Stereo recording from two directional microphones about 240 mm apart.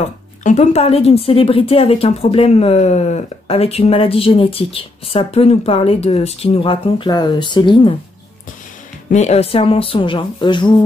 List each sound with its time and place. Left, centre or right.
0.4 s speech: left
9.1 s speech: left